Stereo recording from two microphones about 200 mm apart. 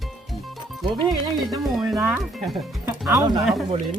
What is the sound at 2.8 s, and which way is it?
Music, 20° right (ahead or behind).